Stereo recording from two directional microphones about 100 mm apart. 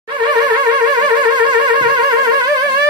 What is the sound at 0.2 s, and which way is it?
Music, 50° right (ahead or behind).